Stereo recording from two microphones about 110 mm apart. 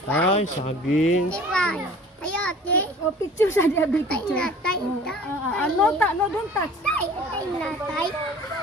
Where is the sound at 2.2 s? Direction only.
10° left (ahead or behind).